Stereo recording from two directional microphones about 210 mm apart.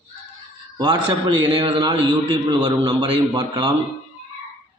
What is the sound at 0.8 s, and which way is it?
A man's voice, 20° right (ahead or behind).